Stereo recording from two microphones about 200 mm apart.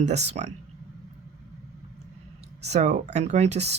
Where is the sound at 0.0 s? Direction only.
35° right (ahead or behind).